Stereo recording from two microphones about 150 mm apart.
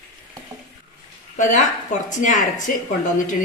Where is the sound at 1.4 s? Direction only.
55° left (ahead or behind).